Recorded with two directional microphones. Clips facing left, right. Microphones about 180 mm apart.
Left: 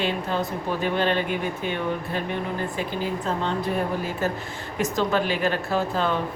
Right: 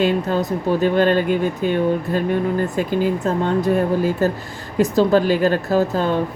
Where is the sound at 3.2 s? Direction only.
45° right (ahead or behind).